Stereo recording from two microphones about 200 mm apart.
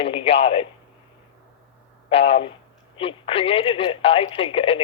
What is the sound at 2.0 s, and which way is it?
A man's voice, 30° left (ahead or behind).